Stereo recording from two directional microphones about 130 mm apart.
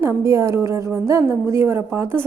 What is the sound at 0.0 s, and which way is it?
A woman's voice, 20° right (ahead or behind).